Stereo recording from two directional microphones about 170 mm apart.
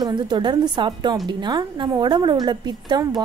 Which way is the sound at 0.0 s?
25° right (ahead or behind).